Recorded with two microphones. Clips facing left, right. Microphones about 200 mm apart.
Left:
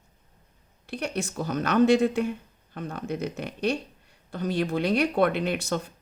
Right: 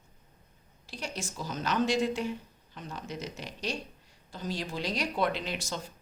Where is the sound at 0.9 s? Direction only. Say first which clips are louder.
Left 8 dB; 60° left (ahead or behind).